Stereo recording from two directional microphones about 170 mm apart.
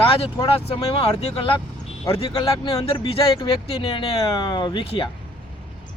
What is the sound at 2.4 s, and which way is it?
Speech, 20° left (ahead or behind).